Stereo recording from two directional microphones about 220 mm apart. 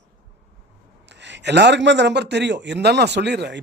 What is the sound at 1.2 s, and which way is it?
Speech, 50° right (ahead or behind).